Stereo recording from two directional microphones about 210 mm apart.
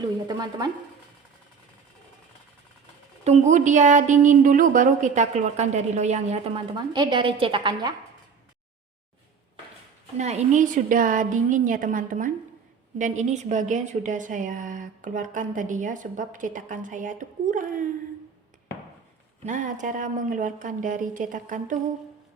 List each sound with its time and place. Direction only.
0.3 s a woman's voice: 20° right (ahead or behind)
3.2 s a woman's voice: 35° right (ahead or behind)
10.2 s a woman's voice: 35° right (ahead or behind)
19.5 s a woman's voice: 40° right (ahead or behind)